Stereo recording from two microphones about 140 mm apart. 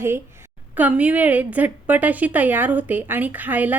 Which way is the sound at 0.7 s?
10° right (ahead or behind).